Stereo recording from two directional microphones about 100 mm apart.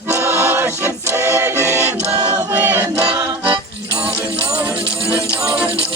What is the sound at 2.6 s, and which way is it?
Choir, 20° right (ahead or behind).